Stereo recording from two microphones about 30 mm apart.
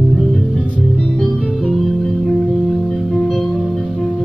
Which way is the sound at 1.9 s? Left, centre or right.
Centre.